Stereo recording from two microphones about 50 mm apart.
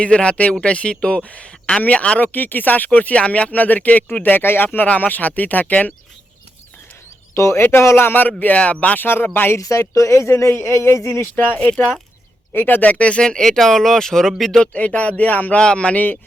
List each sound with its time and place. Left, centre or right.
0.0 s speech: left
7.3 s speech: left
7.6 s speech: left
8.4 s speech: left
9.0 s speech: left
9.7 s speech: left
10.3 s speech: left
11.3 s speech: left; by 14.6 s centre
14.6 s speech: left
15.5 s speech: left